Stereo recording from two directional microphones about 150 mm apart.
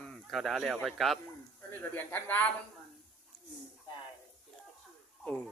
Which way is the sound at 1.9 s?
10° left (ahead or behind).